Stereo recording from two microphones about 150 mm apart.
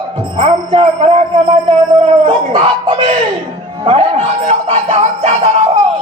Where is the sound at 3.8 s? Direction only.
40° right (ahead or behind).